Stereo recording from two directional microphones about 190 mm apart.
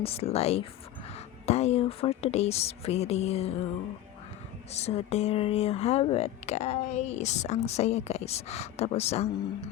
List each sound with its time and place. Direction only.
0.0 s speech: 30° left (ahead or behind)
4.7 s speech: 35° left (ahead or behind)